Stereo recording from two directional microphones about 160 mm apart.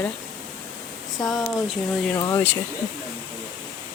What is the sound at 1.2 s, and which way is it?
Speech, centre (ahead or behind).